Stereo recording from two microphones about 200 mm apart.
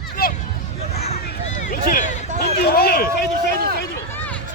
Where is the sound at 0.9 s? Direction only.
30° left (ahead or behind).